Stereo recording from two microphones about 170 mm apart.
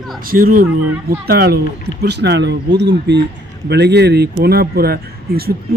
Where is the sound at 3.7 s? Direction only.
80° right.